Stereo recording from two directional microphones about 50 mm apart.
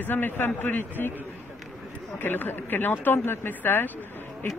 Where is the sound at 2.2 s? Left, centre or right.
Left.